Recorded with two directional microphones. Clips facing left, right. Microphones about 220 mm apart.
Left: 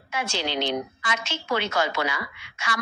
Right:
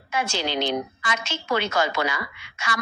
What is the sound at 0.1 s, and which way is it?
A woman's voice, 45° right (ahead or behind).